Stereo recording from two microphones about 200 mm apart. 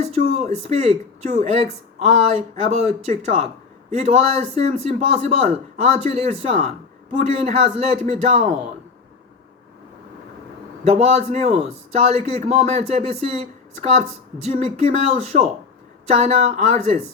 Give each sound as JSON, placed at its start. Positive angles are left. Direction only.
{"t": 0.0, "sound": "speech", "side_deg": -30}
{"t": 10.8, "sound": "speech", "side_deg": -35}